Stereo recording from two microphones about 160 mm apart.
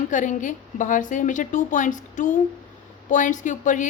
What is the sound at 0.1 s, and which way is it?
A woman's voice, 50° left (ahead or behind).